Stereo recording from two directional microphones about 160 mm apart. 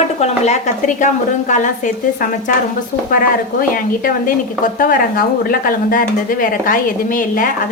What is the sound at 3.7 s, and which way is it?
Speech, 60° left (ahead or behind).